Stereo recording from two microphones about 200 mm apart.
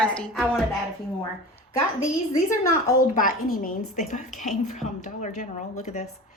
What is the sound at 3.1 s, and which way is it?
A woman's voice, 45° left (ahead or behind).